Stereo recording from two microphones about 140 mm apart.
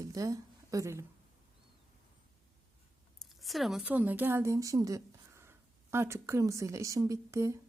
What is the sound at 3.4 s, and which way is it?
A woman's voice, centre (ahead or behind).